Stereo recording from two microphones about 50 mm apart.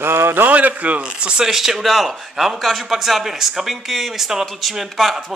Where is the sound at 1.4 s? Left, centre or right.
Centre.